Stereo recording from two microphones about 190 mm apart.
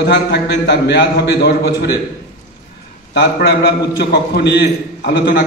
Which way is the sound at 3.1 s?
65° left (ahead or behind).